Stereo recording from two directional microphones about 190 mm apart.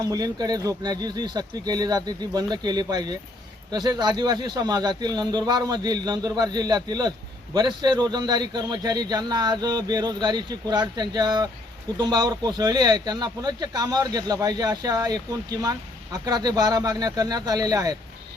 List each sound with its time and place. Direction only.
0.0 s a man's voice: 20° right (ahead or behind)